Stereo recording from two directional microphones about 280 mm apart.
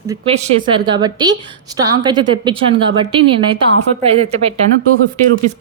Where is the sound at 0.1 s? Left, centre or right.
Right.